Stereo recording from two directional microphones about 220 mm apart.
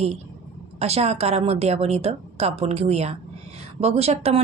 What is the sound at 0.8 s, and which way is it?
Speech, 30° right (ahead or behind).